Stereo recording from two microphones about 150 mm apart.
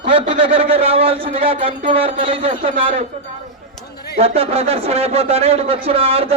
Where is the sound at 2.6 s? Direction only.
60° right (ahead or behind).